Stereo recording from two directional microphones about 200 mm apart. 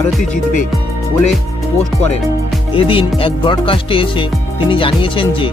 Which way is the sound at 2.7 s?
25° left (ahead or behind).